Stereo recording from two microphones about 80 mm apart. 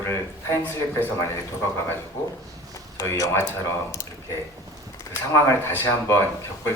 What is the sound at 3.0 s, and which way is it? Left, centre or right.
Speech, left.